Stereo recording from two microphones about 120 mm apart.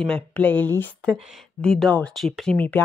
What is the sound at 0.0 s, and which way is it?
Speech, 10° left (ahead or behind).